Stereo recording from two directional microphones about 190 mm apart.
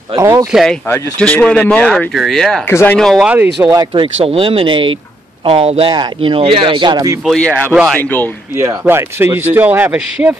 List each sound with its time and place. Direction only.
0.1 s a man's voice: 15° right (ahead or behind)
0.5 s speech: centre (ahead or behind)
3.7 s speech: 25° right (ahead or behind)
7.2 s a man's voice: 5° left (ahead or behind)
8.5 s a man's voice: 15° right (ahead or behind)